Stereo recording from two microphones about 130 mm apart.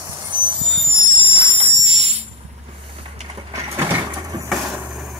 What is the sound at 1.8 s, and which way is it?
Music, 50° right (ahead or behind).